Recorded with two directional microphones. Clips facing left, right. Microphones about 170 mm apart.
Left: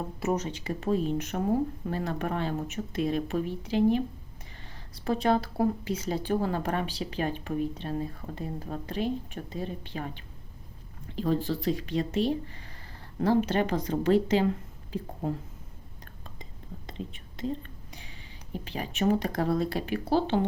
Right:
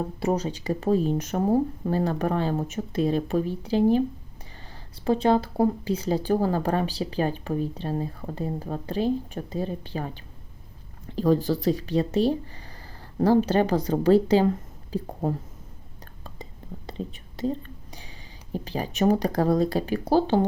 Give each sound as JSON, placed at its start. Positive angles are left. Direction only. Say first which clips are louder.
{"t": 0.2, "sound": "speech", "louder": "right 3 dB", "side_deg": -30}
{"t": 16.4, "sound": "whispering", "louder": "right 5 dB", "side_deg": -35}
{"t": 18.5, "sound": "speech", "louder": "right 5 dB", "side_deg": -35}